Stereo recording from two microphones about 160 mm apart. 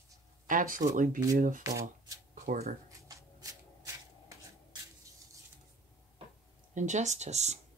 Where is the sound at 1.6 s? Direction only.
20° right (ahead or behind).